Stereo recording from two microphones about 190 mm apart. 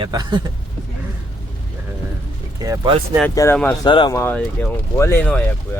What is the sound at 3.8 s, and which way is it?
Speech, 25° left (ahead or behind).